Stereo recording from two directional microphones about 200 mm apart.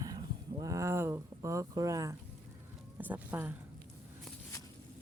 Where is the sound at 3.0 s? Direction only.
10° right (ahead or behind).